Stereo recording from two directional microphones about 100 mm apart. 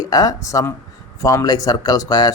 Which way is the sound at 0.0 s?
40° left (ahead or behind).